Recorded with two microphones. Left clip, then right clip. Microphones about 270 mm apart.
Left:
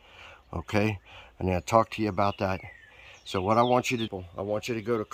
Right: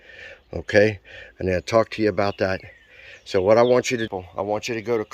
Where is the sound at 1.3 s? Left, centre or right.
Left.